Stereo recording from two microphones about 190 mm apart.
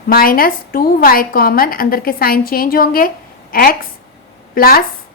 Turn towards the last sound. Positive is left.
turn(degrees=50)  # may be behind; listen again after turning